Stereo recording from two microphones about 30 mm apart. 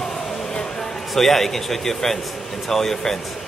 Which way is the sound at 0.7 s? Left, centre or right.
Centre.